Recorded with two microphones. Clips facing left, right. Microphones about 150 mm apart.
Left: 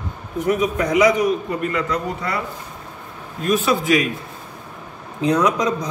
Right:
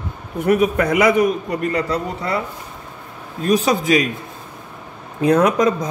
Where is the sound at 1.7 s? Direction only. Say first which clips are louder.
Right 2 dB; 35° right (ahead or behind).